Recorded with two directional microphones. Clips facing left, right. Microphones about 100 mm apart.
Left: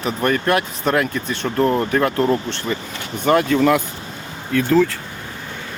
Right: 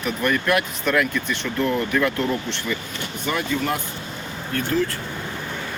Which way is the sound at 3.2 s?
50° left (ahead or behind).